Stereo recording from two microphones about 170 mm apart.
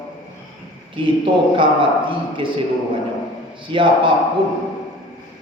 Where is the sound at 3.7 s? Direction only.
30° right (ahead or behind).